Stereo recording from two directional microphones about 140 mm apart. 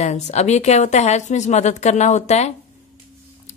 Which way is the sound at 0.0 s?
55° left (ahead or behind).